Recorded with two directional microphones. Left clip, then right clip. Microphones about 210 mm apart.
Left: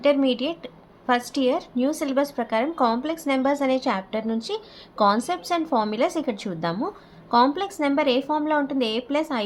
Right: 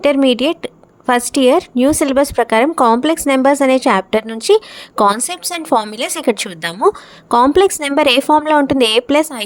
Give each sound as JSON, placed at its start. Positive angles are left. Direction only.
{"t": 0.0, "sound": "a woman's voice", "side_deg": -45}